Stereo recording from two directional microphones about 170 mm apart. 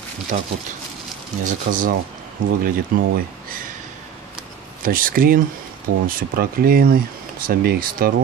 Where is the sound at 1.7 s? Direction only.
70° right (ahead or behind).